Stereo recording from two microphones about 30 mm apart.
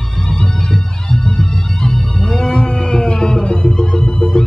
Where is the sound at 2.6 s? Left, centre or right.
Left.